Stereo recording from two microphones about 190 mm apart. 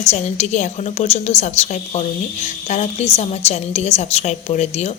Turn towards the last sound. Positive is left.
turn(degrees=35)  # may be behind; listen again after turning